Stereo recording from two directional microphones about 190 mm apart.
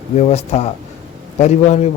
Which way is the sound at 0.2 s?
35° left (ahead or behind).